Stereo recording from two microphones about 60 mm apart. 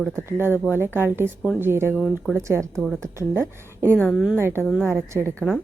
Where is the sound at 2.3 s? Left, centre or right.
Right.